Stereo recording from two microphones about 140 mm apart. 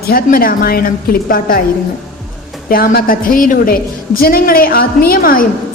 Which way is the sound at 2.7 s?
90° left.